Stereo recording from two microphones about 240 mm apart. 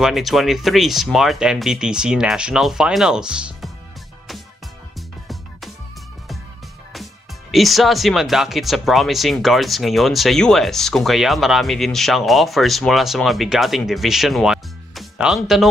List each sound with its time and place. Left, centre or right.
0.0 s speech: centre
4.9 s music: centre
7.5 s speech: centre